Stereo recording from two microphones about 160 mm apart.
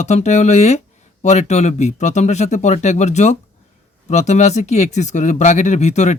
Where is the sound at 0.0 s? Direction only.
45° left (ahead or behind).